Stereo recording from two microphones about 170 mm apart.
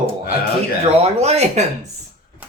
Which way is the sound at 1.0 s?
40° right (ahead or behind).